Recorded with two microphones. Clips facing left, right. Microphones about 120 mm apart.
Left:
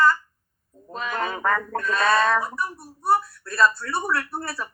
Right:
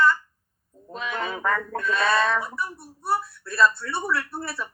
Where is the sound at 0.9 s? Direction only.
35° left (ahead or behind).